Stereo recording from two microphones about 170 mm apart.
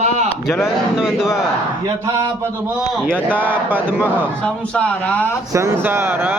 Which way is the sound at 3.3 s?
10° right (ahead or behind).